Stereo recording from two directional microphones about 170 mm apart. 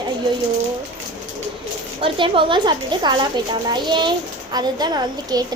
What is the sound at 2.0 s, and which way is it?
A child's voice, 30° right (ahead or behind).